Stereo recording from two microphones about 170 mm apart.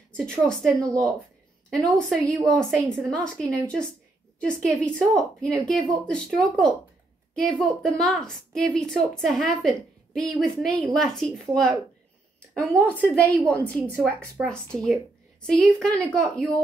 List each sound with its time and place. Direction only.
0.2 s a woman's voice: 5° left (ahead or behind)
0.7 s speech: 20° right (ahead or behind)
2.0 s a woman's voice: 5° left (ahead or behind)
13.8 s a woman's voice: 15° right (ahead or behind)
14.5 s a woman's voice: 5° left (ahead or behind)